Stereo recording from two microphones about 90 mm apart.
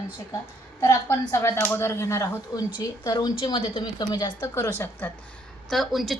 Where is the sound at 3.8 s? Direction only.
55° left (ahead or behind).